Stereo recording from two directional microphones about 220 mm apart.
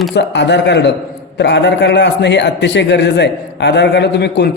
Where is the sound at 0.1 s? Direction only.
50° left (ahead or behind).